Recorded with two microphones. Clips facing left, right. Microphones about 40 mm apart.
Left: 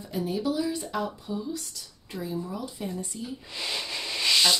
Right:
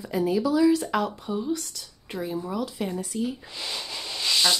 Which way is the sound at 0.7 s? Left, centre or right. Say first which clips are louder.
Right 7 dB; right.